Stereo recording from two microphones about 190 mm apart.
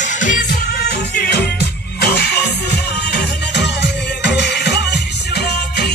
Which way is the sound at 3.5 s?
65° left (ahead or behind).